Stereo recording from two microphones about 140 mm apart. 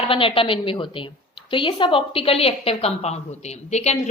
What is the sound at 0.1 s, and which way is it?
A woman's voice, 40° left (ahead or behind).